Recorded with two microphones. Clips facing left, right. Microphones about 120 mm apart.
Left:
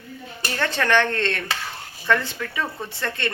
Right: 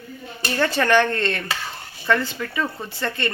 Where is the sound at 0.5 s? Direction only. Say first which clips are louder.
Right 3 dB; 5° right (ahead or behind).